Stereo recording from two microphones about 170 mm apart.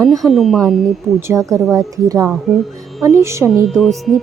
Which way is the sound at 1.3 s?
20° right (ahead or behind).